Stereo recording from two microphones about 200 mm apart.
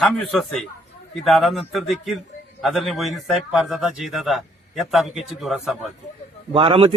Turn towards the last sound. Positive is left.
turn(degrees=-30)  # may be behind; listen again after turning